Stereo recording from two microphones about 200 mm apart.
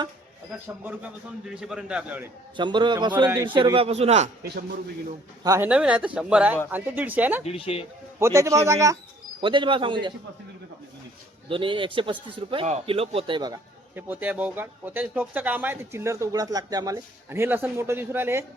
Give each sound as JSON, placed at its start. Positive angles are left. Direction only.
{"t": 1.5, "sound": "a man's voice", "side_deg": -5}
{"t": 2.6, "sound": "speech", "side_deg": -25}
{"t": 5.4, "sound": "speech", "side_deg": -15}
{"t": 5.6, "sound": "a man's voice", "side_deg": -5}
{"t": 7.4, "sound": "speech", "side_deg": 30}
{"t": 8.2, "sound": "speech", "side_deg": -15}
{"t": 11.4, "sound": "speech", "side_deg": -25}
{"t": 13.9, "sound": "speech", "side_deg": -10}